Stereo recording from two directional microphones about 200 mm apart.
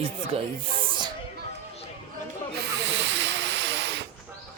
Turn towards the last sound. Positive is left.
turn(degrees=-60)  # may be behind; listen again after turning